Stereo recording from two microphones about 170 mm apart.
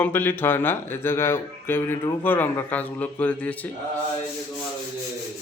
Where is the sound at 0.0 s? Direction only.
10° left (ahead or behind).